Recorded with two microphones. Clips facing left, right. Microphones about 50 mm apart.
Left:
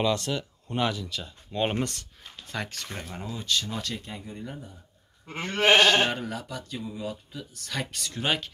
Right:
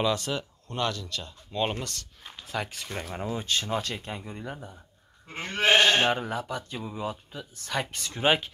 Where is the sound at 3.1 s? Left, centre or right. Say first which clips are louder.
Even; right.